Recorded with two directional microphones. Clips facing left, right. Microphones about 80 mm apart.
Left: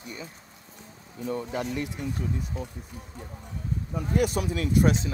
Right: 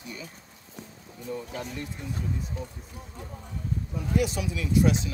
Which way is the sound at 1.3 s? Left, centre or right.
Left.